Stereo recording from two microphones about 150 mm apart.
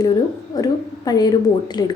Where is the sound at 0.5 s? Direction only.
25° left (ahead or behind).